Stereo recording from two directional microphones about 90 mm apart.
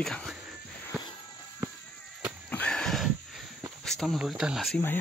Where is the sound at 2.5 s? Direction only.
15° left (ahead or behind).